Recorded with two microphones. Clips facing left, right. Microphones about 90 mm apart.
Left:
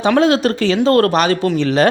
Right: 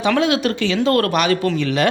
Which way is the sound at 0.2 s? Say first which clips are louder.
Left 4 dB; 35° left (ahead or behind).